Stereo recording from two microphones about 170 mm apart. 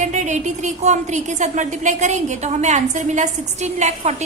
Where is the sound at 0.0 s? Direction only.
45° right (ahead or behind).